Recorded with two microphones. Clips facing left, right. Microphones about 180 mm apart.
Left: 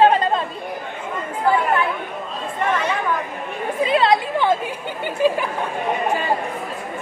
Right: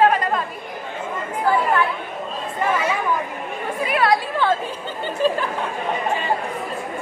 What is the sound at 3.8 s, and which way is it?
Speech, 25° left (ahead or behind).